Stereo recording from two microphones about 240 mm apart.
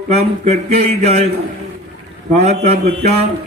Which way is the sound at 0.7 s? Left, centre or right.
Right.